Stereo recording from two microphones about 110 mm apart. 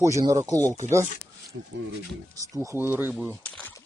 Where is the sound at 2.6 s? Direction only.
20° right (ahead or behind).